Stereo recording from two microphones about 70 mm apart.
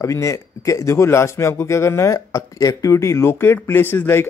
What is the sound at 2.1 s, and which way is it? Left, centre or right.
Speech, left.